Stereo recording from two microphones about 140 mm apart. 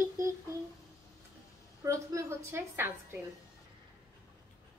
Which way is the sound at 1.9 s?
20° right (ahead or behind).